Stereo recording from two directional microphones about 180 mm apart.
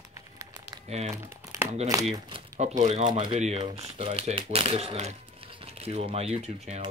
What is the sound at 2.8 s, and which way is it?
Speech, 40° right (ahead or behind).